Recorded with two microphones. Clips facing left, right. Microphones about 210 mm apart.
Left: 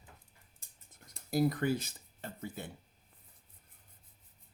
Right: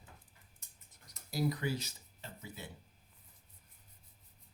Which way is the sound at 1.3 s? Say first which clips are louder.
Left 5 dB; 50° left (ahead or behind).